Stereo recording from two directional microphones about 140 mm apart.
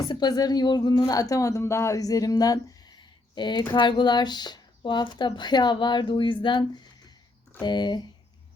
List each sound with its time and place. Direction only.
0.0 s speech: 30° left (ahead or behind)